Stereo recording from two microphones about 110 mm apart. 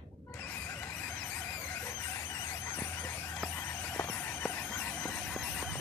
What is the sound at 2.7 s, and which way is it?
Vehicle, 15° left (ahead or behind).